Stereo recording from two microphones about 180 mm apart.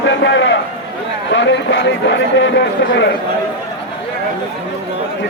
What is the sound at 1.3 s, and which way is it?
Speech, 80° left.